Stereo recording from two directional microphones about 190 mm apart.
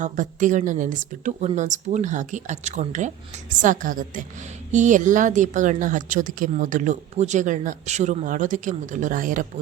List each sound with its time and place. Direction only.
0.0 s a woman's voice: 40° right (ahead or behind)